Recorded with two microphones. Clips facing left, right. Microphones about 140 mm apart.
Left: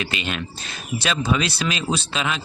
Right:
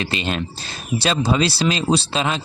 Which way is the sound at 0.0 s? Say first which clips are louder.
Right 4 dB; 35° right (ahead or behind).